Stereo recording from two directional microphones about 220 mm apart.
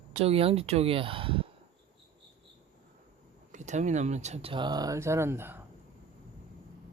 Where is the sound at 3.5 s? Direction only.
35° right (ahead or behind); by 5.5 s 10° right (ahead or behind).